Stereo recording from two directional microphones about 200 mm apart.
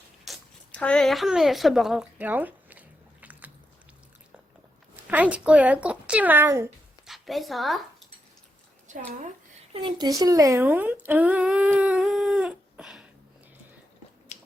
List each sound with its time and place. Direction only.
0.3 s a sound: 5° left (ahead or behind)
5.0 s speech: 5° right (ahead or behind)
7.1 s a woman's voice: centre (ahead or behind)
8.9 s a woman's voice: 40° right (ahead or behind)
9.7 s speech: 20° right (ahead or behind); by 13.1 s 5° right (ahead or behind)